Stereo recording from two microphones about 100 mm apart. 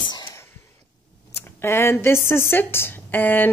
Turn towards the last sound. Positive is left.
turn(degrees=20)  # may be behind; listen again after turning